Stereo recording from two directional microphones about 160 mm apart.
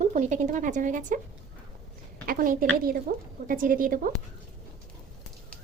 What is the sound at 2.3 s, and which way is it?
A woman's voice, 60° right (ahead or behind).